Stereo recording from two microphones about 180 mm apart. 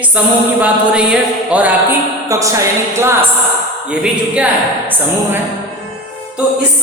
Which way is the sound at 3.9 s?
5° right (ahead or behind).